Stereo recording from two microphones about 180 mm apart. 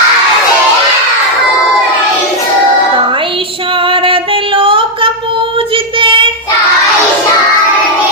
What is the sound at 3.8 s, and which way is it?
Singing, 30° right (ahead or behind).